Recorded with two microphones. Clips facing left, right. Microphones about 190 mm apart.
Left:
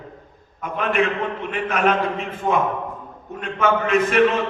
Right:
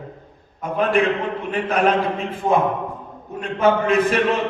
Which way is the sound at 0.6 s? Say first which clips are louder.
Right 3 dB; 35° right (ahead or behind).